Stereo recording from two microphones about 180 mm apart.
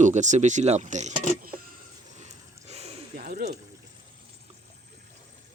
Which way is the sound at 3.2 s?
55° right (ahead or behind).